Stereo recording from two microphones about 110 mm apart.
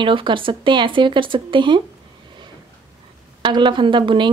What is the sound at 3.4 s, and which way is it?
Speech, 45° right (ahead or behind).